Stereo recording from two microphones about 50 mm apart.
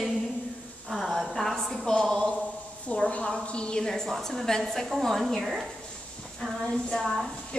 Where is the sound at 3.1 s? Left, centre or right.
Left; by 5.4 s centre.